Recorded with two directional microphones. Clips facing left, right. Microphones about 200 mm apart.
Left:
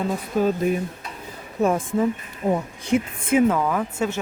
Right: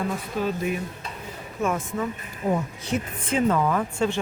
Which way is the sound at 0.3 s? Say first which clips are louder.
Left 7 dB; 45° left (ahead or behind).